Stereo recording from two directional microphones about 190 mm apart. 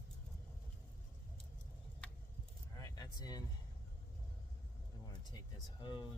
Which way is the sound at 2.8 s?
20° left (ahead or behind).